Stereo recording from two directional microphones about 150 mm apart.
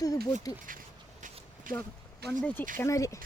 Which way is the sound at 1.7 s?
70° right (ahead or behind).